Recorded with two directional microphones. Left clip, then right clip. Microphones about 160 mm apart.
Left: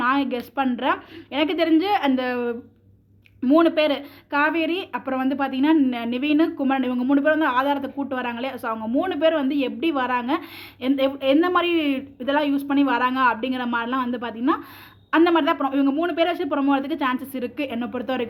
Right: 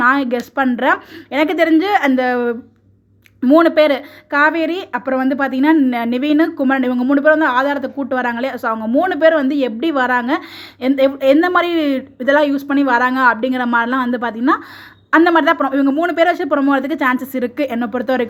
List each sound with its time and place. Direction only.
0.0 s speech: 35° right (ahead or behind)